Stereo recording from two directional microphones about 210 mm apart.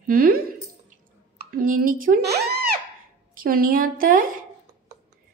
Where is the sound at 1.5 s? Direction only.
40° right (ahead or behind).